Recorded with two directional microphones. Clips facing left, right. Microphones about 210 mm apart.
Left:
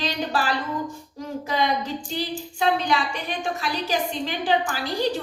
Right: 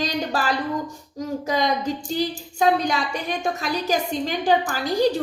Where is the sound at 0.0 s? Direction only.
45° right (ahead or behind).